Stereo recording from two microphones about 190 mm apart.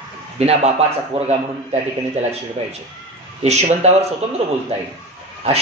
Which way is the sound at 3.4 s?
35° right (ahead or behind).